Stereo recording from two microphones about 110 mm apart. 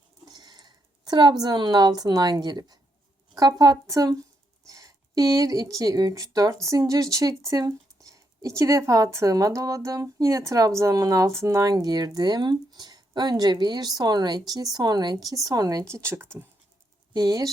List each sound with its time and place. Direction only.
0.3 s speech: 40° right (ahead or behind); by 16.5 s 20° right (ahead or behind)
17.2 s speech: 35° right (ahead or behind)